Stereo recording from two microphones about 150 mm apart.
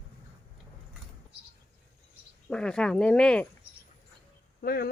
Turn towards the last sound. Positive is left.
turn(degrees=90)